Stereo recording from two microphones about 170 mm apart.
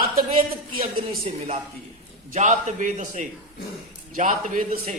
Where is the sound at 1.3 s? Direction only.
35° right (ahead or behind).